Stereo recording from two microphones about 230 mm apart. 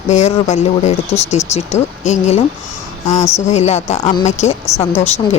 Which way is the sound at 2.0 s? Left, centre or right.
Left.